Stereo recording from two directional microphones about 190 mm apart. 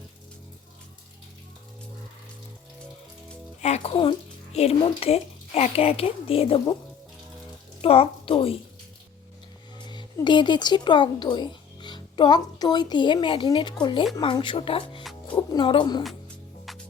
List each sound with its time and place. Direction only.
3.6 s a child's voice: 30° left (ahead or behind)
7.8 s a woman's voice: 30° left (ahead or behind)
9.7 s speech: 25° left (ahead or behind)
16.7 s music: centre (ahead or behind)